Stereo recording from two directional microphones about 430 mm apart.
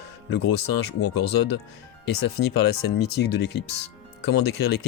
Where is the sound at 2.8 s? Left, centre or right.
Left.